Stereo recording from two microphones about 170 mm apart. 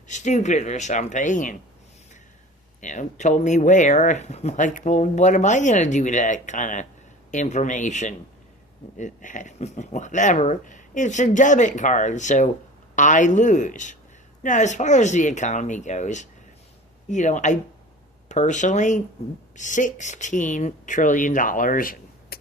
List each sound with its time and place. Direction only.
0.1 s speech: 45° left (ahead or behind)
2.8 s speech: 45° left (ahead or behind)